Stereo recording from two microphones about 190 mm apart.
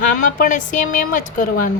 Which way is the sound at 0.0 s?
45° left (ahead or behind).